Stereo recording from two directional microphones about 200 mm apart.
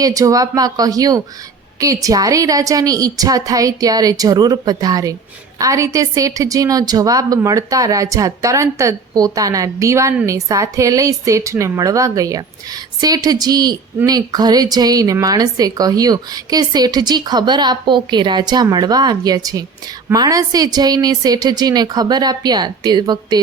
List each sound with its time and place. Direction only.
0.0 s a woman's voice: 15° right (ahead or behind)